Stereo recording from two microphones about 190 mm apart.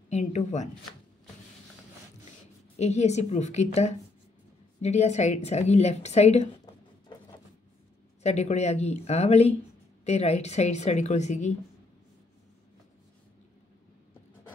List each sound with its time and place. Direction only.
0.1 s speech: 35° left (ahead or behind)
2.8 s a woman's voice: 35° left (ahead or behind)
8.2 s a woman's voice: 35° left (ahead or behind)